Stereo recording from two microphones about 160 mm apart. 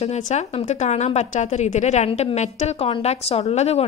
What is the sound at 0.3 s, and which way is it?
A woman's voice, 45° left (ahead or behind).